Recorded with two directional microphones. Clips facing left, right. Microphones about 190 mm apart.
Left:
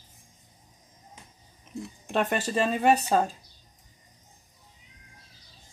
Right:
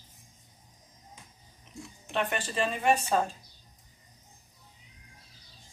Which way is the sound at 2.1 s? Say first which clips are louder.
Left 4 dB; 40° left (ahead or behind).